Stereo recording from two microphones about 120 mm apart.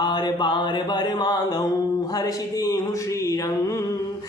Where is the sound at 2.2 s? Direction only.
30° left (ahead or behind).